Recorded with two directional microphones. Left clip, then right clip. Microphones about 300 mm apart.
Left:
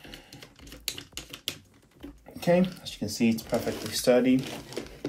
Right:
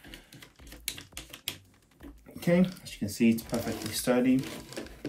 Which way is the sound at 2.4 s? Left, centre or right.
Centre.